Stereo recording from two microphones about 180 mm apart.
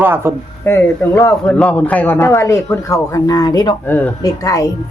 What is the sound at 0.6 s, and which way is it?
A man's voice, 10° left (ahead or behind).